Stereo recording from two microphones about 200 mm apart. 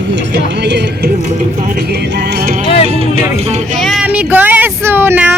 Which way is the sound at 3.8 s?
Centre (ahead or behind).